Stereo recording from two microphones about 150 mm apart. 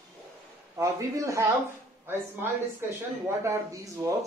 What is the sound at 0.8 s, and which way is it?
Speech, 20° right (ahead or behind).